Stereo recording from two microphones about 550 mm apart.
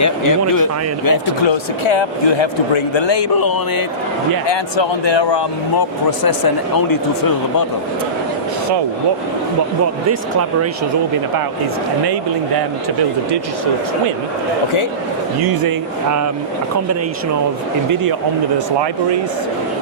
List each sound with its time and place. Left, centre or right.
0.0 s speech: left
1.5 s speech: left
4.4 s speech: left